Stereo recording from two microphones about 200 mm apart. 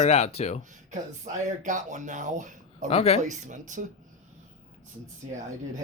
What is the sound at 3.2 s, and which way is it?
Speech, 40° right (ahead or behind).